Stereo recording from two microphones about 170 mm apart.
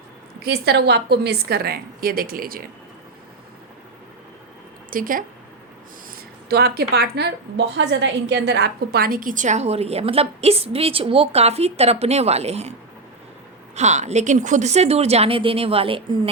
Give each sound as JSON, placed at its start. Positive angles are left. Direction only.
{"t": 0.4, "sound": "a woman's voice", "side_deg": -70}
{"t": 4.9, "sound": "speech", "side_deg": -55}
{"t": 6.5, "sound": "a woman's voice", "side_deg": -65}
{"t": 13.7, "sound": "a woman's voice", "side_deg": -40}